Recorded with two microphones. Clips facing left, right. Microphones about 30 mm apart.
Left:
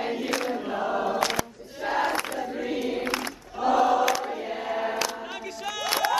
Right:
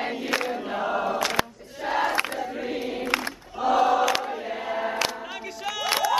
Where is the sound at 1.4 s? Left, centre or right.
Right.